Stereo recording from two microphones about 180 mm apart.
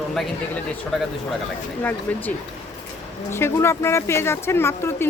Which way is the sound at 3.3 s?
15° left (ahead or behind).